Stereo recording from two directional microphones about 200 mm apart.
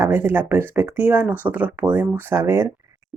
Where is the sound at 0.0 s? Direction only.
10° right (ahead or behind).